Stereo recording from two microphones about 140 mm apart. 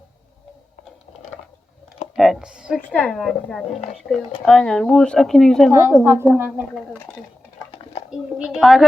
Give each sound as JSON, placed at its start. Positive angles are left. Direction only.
{"t": 2.1, "sound": "speech", "side_deg": 0}
{"t": 2.9, "sound": "speech", "side_deg": 10}
{"t": 5.7, "sound": "a woman's voice", "side_deg": -20}
{"t": 7.1, "sound": "speech", "side_deg": 5}